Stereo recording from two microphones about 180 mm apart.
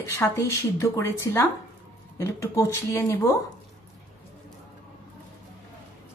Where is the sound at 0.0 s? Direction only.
15° left (ahead or behind).